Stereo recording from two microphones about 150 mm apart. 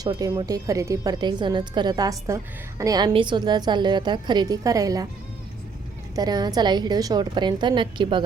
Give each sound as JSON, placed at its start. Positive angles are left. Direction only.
{"t": 0.0, "sound": "a woman's voice", "side_deg": -25}
{"t": 6.1, "sound": "a woman's voice", "side_deg": -25}